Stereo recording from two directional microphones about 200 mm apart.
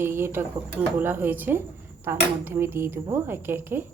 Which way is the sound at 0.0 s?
10° right (ahead or behind).